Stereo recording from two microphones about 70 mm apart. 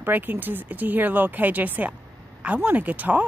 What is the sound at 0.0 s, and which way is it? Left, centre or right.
Speech, right.